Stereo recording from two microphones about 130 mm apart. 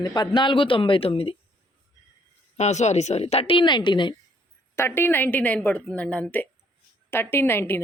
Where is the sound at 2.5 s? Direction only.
60° left (ahead or behind); by 4.2 s 35° left (ahead or behind).